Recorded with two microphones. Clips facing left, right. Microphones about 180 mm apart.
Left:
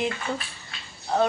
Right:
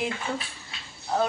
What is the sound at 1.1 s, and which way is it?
Speech, 5° right (ahead or behind).